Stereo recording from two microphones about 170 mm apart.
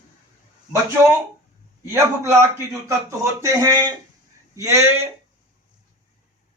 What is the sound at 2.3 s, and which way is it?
A man's voice, 15° right (ahead or behind).